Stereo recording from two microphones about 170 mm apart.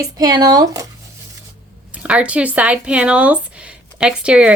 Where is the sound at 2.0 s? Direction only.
5° right (ahead or behind).